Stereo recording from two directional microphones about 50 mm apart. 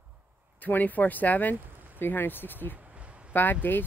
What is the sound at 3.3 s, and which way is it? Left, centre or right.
Speech, left.